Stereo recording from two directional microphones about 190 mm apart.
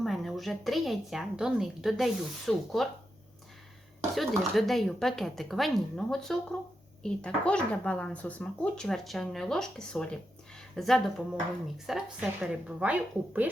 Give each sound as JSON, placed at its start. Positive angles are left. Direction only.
{"t": 0.0, "sound": "speech", "side_deg": 0}
{"t": 4.1, "sound": "speech", "side_deg": 0}